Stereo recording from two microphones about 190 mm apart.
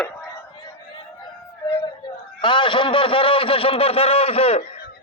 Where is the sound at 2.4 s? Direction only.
25° left (ahead or behind).